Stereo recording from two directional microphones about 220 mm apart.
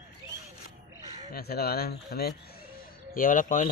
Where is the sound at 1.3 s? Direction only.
45° left (ahead or behind).